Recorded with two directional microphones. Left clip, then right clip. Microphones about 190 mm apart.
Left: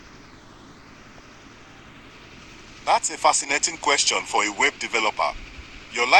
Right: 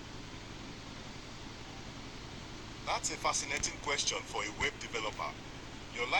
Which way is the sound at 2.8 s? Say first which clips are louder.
Left 15 dB; 50° left (ahead or behind).